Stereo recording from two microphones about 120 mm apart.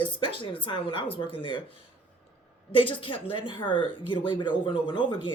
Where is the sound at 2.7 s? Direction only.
45° left (ahead or behind).